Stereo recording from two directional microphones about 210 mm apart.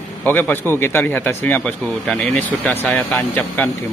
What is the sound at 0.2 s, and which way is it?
Speech, 10° left (ahead or behind).